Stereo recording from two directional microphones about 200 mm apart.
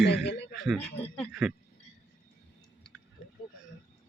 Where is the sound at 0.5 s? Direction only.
Centre (ahead or behind).